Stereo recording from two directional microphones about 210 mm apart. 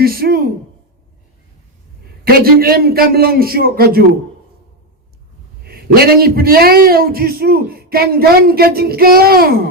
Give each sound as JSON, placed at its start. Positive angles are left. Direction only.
{"t": 0.0, "sound": "speech", "side_deg": -45}
{"t": 2.2, "sound": "a man's voice", "side_deg": -45}
{"t": 5.6, "sound": "a man's voice", "side_deg": -45}